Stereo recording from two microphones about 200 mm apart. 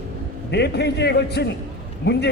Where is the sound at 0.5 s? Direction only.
55° left (ahead or behind).